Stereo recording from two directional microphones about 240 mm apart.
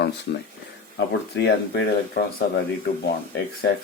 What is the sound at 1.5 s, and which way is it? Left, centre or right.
Speech, left.